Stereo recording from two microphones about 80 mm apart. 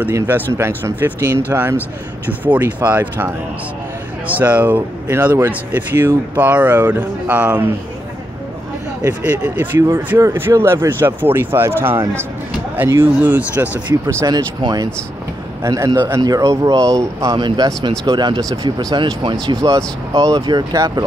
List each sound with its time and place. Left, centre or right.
0.1 s speech: right; by 7.7 s centre
9.3 s speech: right
9.8 s speech: right
13.3 s speech: centre
14.0 s speech: right
15.6 s speech: right
16.2 s speech: right
16.4 s speech: right
18.0 s speech: right
18.5 s speech: right
18.9 s speech: right
19.7 s speech: right
20.3 s speech: right
20.7 s speech: right